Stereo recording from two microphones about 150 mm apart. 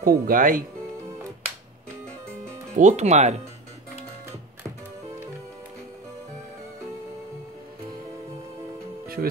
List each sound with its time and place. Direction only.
0.0 s speech: 70° right (ahead or behind)
2.7 s speech: 50° right (ahead or behind)
9.0 s music: 80° right